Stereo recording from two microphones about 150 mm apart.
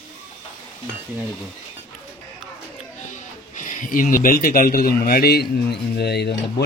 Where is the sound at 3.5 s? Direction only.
60° left (ahead or behind).